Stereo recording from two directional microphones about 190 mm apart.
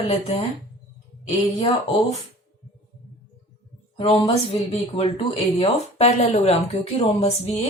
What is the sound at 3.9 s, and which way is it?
Speech, 30° left (ahead or behind).